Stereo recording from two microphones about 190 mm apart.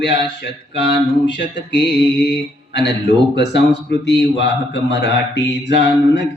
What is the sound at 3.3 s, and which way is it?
A man's voice, 65° left (ahead or behind).